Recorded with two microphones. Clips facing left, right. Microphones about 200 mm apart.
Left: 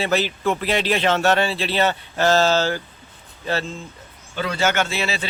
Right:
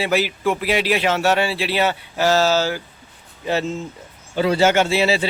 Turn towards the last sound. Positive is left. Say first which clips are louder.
# right 6 dB
turn(degrees=-30)  # may be behind; listen again after turning